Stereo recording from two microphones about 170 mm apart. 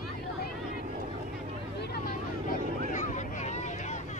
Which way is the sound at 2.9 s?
45° left (ahead or behind).